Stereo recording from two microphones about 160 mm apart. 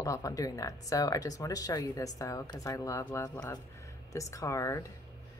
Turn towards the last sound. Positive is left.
turn(degrees=20)  # may be behind; listen again after turning